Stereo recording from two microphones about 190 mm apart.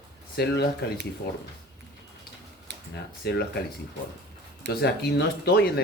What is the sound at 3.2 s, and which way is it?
Speech, 60° left (ahead or behind).